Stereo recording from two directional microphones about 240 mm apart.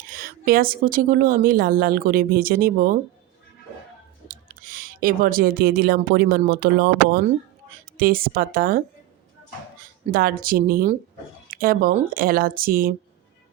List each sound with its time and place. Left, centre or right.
0.1 s a woman's voice: right
4.3 s a woman's voice: right
10.1 s a woman's voice: right